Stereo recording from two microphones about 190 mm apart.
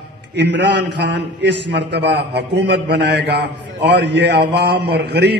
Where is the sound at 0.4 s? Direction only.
65° right (ahead or behind).